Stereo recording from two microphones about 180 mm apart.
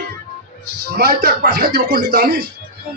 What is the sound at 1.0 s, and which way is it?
A man's voice, 60° right (ahead or behind).